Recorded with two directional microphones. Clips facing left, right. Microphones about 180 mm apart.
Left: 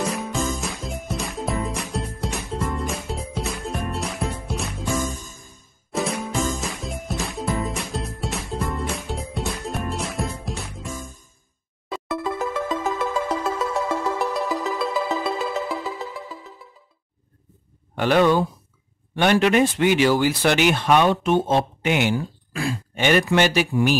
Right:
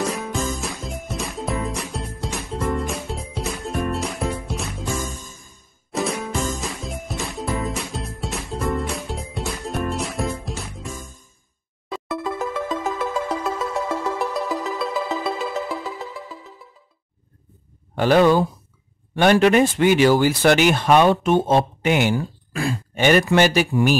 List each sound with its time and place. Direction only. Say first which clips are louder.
0.0 s music: even; centre (ahead or behind)
11.9 s music: even; centre (ahead or behind)
17.9 s a sound: right 2 dB; 35° right (ahead or behind)
19.1 s speech: right 3 dB; 40° right (ahead or behind)